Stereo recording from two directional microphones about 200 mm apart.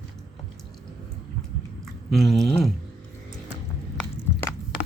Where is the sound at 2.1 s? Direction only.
Centre (ahead or behind).